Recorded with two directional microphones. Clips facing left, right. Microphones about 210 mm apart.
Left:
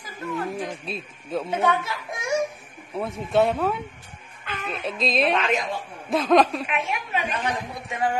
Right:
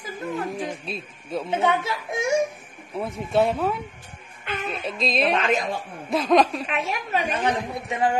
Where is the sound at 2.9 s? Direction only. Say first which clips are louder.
Left 1 dB; centre (ahead or behind).